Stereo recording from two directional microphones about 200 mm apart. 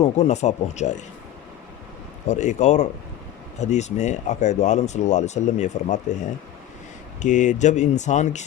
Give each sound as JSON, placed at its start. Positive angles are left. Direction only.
{"t": 0.0, "sound": "speech", "side_deg": 35}
{"t": 2.2, "sound": "speech", "side_deg": 35}